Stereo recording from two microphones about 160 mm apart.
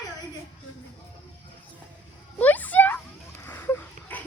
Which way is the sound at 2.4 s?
10° left (ahead or behind).